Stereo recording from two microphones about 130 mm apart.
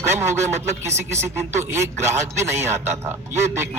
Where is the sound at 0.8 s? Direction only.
20° right (ahead or behind).